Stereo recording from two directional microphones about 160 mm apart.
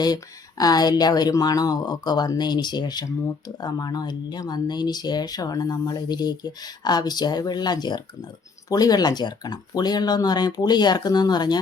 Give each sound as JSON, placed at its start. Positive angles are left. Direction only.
{"t": 0.6, "sound": "speech", "side_deg": 25}